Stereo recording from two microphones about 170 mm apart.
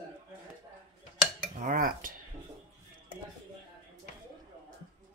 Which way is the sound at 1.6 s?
50° right (ahead or behind).